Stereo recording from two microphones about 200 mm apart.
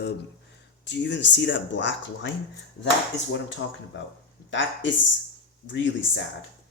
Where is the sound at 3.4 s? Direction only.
65° left (ahead or behind).